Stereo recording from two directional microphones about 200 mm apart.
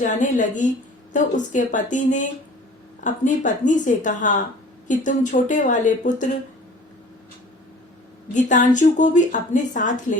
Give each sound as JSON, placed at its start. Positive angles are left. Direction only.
{"t": 0.0, "sound": "a woman's voice", "side_deg": 40}
{"t": 8.3, "sound": "a woman's voice", "side_deg": 40}